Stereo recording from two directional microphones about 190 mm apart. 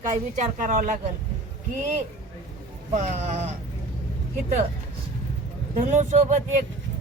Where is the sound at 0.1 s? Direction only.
40° right (ahead or behind).